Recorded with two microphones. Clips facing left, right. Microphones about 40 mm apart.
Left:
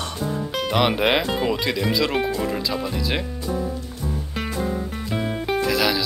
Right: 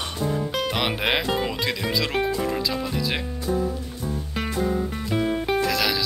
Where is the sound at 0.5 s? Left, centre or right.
Centre.